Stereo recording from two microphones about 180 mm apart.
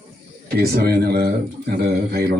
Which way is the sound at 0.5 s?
60° right (ahead or behind).